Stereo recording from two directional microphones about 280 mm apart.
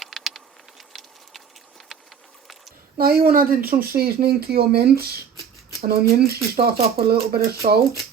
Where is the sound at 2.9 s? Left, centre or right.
Right.